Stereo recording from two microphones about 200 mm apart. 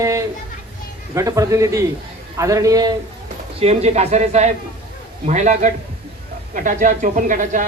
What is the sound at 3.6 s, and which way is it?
Speech, 30° right (ahead or behind).